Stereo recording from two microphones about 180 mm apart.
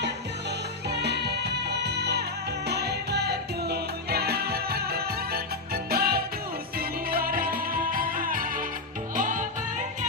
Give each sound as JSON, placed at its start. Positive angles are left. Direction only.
{"t": 0.9, "sound": "music", "side_deg": -70}